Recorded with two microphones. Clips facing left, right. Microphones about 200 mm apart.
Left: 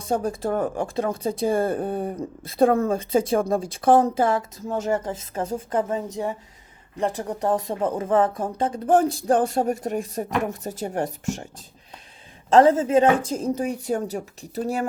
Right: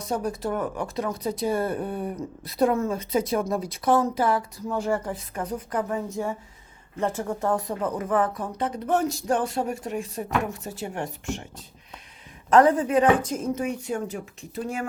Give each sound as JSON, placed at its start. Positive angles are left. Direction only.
{"t": 0.0, "sound": "a woman's voice", "side_deg": 30}
{"t": 12.5, "sound": "a woman's voice", "side_deg": 25}